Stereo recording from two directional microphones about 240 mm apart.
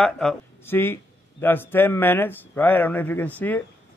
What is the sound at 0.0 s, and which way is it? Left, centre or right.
A man's voice, centre.